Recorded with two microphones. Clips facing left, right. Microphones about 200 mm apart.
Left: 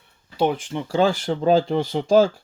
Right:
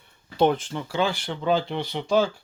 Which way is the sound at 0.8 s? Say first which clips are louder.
Left 7 dB; 45° left (ahead or behind).